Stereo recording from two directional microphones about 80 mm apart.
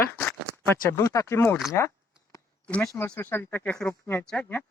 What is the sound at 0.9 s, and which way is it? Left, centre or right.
Speech, left.